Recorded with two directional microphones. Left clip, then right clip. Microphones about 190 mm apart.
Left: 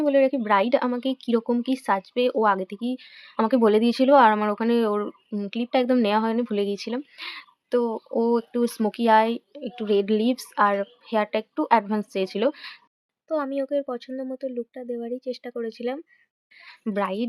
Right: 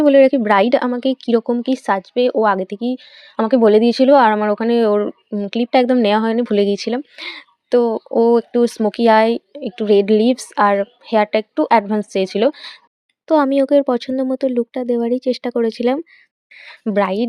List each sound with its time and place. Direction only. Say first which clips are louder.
0.0 s a woman's voice: right 9 dB; 30° right (ahead or behind)
13.2 s speech: right 12 dB; 40° right (ahead or behind)
16.8 s a woman's voice: right 9 dB; 25° right (ahead or behind)